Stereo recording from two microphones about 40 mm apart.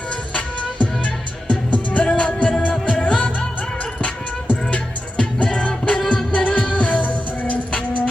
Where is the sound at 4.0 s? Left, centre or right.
Left.